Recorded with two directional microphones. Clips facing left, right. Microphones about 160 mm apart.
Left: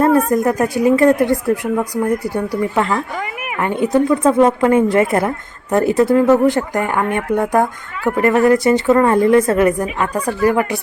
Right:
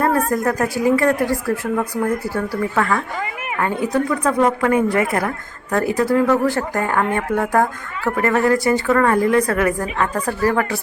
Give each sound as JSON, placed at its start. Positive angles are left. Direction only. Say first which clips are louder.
{"t": 0.0, "sound": "speech", "louder": "left 5 dB", "side_deg": 20}